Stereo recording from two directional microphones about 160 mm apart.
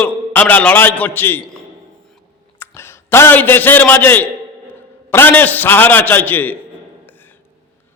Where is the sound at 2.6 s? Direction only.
15° left (ahead or behind).